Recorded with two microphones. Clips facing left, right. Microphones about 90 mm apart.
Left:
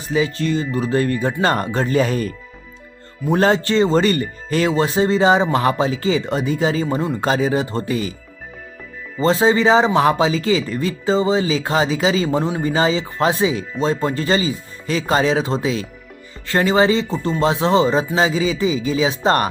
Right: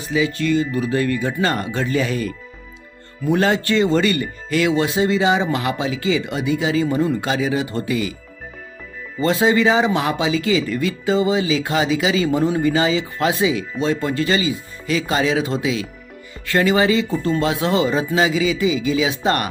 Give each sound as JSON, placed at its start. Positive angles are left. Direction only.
{"t": 0.1, "sound": "speech", "side_deg": 35}
{"t": 9.2, "sound": "speech", "side_deg": 30}